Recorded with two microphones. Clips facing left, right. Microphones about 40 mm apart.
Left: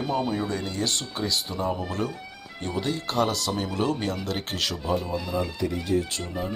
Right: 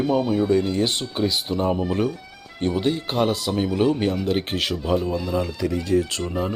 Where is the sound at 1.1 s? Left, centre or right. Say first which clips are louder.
Right 5 dB; right.